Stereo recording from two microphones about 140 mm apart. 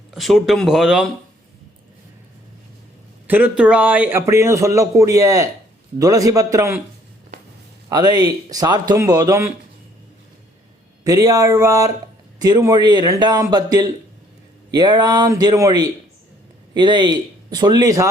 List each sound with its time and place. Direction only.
0.1 s speech: centre (ahead or behind)
3.2 s a man's voice: 10° right (ahead or behind)
7.9 s a man's voice: 30° right (ahead or behind)
11.0 s a man's voice: 25° right (ahead or behind)